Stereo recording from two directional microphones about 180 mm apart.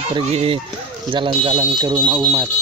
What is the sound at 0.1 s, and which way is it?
Speech, 35° right (ahead or behind).